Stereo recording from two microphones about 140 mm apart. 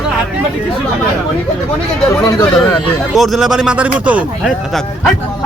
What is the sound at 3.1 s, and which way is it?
Speech, centre (ahead or behind).